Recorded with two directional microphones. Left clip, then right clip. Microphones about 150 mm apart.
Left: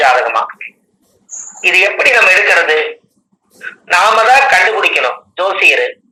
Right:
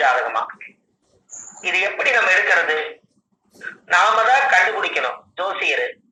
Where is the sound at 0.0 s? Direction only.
20° left (ahead or behind).